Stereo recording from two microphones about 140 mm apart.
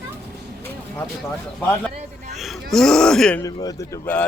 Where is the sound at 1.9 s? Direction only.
55° right (ahead or behind).